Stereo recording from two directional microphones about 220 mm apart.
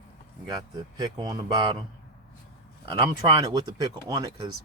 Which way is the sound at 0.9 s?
15° right (ahead or behind).